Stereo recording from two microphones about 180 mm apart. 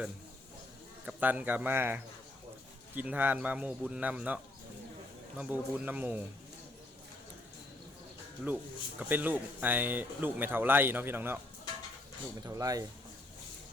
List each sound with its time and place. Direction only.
1.0 s speech: 10° right (ahead or behind)
5.4 s speech: 10° right (ahead or behind)
8.4 s speech: 5° right (ahead or behind)
12.5 s speech: 20° right (ahead or behind)